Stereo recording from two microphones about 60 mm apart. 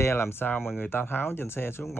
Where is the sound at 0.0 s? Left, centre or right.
Left.